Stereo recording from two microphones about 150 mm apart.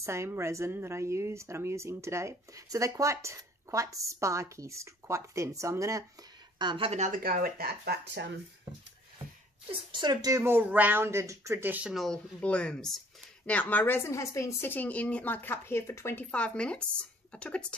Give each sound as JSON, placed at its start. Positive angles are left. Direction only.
{"t": 0.0, "sound": "speech", "side_deg": -20}
{"t": 6.6, "sound": "speech", "side_deg": -30}
{"t": 6.9, "sound": "speech", "side_deg": -50}
{"t": 7.2, "sound": "speech", "side_deg": -75}
{"t": 9.7, "sound": "a woman's voice", "side_deg": -35}
{"t": 11.9, "sound": "speech", "side_deg": 5}